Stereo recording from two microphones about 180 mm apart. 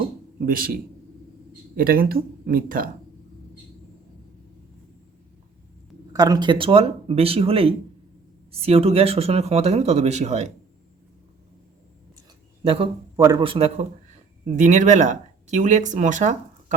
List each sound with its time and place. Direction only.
0.0 s a sound: 50° right (ahead or behind)
1.7 s speech: 50° right (ahead or behind)
6.1 s speech: 20° right (ahead or behind); by 10.5 s 40° right (ahead or behind)
12.6 s speech: 30° right (ahead or behind)
13.1 s a man's voice: 20° right (ahead or behind)
13.4 s speech: 30° right (ahead or behind)